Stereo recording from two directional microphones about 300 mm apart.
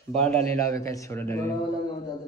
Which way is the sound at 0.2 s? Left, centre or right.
Centre.